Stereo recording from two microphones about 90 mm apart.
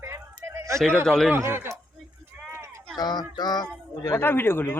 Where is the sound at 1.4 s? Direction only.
30° right (ahead or behind).